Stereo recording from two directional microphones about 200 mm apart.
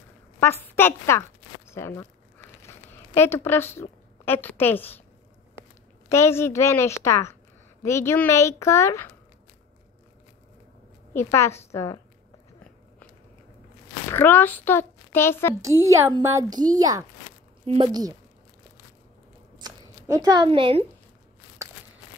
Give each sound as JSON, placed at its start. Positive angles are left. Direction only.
{"t": 0.4, "sound": "a woman's voice", "side_deg": 10}
{"t": 1.7, "sound": "crumpling", "side_deg": 15}
{"t": 3.2, "sound": "a woman's voice", "side_deg": 10}
{"t": 6.0, "sound": "a woman's voice", "side_deg": 15}
{"t": 11.1, "sound": "a woman's voice", "side_deg": 15}
{"t": 14.1, "sound": "a child's voice", "side_deg": 10}
{"t": 15.6, "sound": "a woman's voice", "side_deg": -15}
{"t": 19.6, "sound": "scissors", "side_deg": -20}